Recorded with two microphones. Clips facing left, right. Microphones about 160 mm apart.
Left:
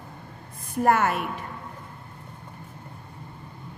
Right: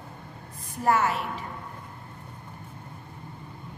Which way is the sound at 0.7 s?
55° left (ahead or behind).